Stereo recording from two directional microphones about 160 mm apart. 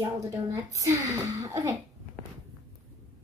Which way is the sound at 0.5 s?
20° right (ahead or behind).